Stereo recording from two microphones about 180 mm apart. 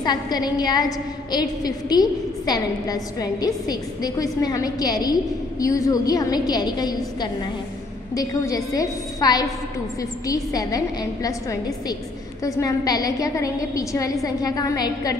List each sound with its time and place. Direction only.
0.0 s a woman's voice: 25° left (ahead or behind)